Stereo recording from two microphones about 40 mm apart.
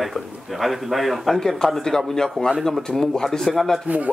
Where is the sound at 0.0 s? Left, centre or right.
Centre.